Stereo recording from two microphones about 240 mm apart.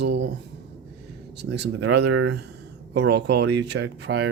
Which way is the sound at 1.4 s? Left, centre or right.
Right.